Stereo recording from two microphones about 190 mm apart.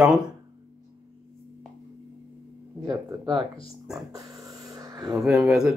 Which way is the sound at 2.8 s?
20° right (ahead or behind).